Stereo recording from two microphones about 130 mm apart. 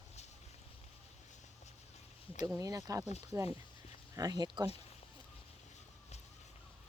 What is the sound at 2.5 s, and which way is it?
Speech, 25° right (ahead or behind).